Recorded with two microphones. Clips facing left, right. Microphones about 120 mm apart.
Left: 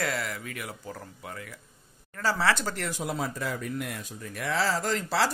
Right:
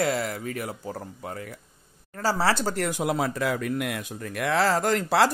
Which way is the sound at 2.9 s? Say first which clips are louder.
Right 6 dB; 70° right (ahead or behind).